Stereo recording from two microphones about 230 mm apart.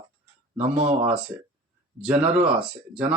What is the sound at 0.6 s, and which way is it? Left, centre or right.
Speech, right.